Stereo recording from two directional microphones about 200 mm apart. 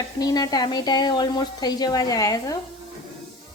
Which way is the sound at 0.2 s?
20° left (ahead or behind).